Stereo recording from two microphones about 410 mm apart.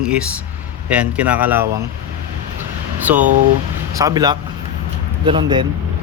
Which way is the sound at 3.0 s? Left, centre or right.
Centre.